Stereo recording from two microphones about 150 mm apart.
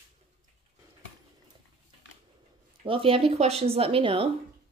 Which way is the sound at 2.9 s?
35° right (ahead or behind).